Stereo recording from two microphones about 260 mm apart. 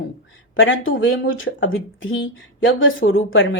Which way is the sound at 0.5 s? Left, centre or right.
Left.